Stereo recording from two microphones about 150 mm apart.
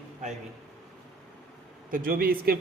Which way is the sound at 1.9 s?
75° right (ahead or behind).